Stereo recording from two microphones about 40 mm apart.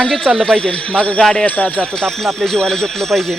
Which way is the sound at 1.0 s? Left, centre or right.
Left.